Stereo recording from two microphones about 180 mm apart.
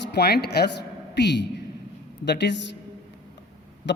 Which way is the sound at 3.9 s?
80° left.